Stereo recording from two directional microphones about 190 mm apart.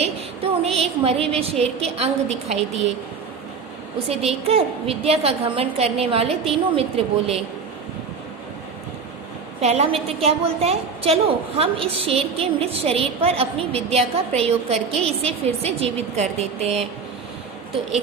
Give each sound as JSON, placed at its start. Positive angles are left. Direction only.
{"t": 0.6, "sound": "a woman's voice", "side_deg": -30}
{"t": 3.9, "sound": "a woman's voice", "side_deg": -30}
{"t": 9.6, "sound": "a woman's voice", "side_deg": -35}